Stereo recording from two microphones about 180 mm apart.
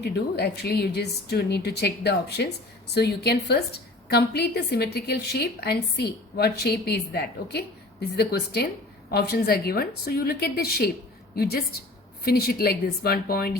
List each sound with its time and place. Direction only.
0.0 s a woman's voice: 65° left (ahead or behind)
12.2 s a woman's voice: 60° left (ahead or behind)